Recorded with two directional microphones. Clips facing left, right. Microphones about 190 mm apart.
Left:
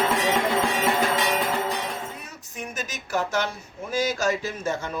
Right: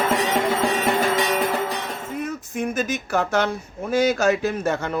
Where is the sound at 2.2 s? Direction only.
55° right (ahead or behind).